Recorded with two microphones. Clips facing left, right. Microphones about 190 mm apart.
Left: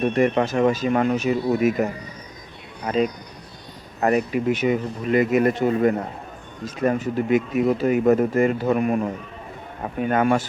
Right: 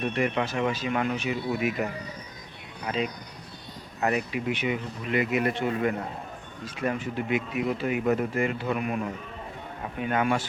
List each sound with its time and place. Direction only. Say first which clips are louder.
0.0 s speech: left 7 dB; 45° left (ahead or behind)